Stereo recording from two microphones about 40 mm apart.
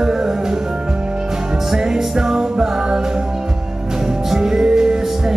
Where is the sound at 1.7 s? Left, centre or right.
Centre.